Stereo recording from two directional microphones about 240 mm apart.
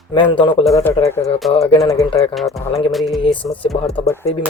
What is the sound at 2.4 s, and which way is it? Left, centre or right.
Speech, centre.